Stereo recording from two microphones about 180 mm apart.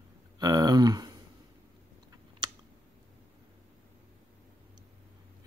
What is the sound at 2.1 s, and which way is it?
Chewing, 25° right (ahead or behind).